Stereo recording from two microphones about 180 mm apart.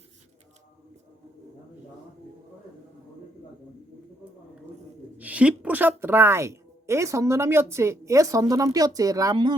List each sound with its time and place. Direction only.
5.1 s a woman's voice: 10° right (ahead or behind); by 9.6 s 25° right (ahead or behind)